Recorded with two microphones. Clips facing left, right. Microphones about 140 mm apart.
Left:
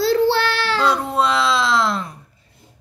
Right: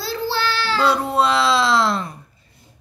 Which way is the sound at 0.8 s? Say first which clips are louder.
Right 2 dB; 5° right (ahead or behind).